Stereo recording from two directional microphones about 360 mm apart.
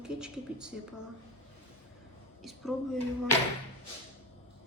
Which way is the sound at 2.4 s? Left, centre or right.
Centre.